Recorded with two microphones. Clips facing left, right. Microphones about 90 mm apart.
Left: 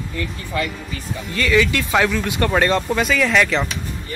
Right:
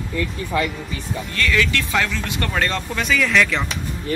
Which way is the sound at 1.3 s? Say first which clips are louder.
Left 4 dB; 15° left (ahead or behind).